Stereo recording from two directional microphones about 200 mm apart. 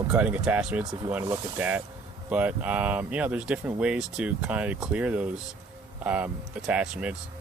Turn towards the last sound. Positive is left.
turn(degrees=-5)  # may be behind; listen again after turning